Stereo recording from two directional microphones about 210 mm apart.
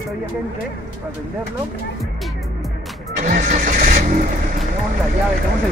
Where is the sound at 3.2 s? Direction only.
35° right (ahead or behind).